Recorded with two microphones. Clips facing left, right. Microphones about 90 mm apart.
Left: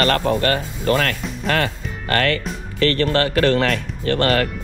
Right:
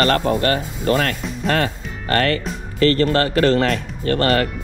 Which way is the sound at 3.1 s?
30° right (ahead or behind).